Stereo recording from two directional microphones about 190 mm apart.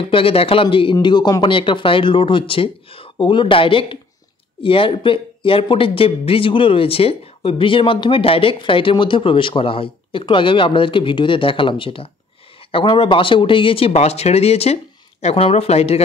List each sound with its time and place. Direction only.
0.0 s speech: 30° left (ahead or behind)